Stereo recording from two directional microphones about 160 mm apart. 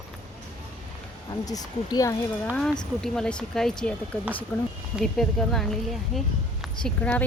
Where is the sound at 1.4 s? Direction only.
25° left (ahead or behind).